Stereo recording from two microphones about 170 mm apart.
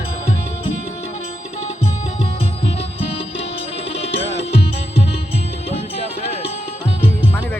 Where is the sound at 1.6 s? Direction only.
40° left (ahead or behind).